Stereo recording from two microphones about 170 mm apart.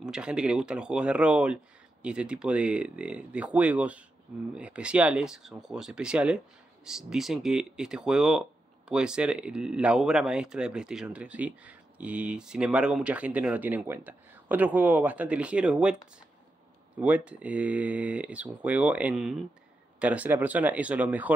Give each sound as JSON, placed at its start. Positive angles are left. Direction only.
{"t": 0.0, "sound": "speech", "side_deg": -5}
{"t": 17.0, "sound": "speech", "side_deg": -10}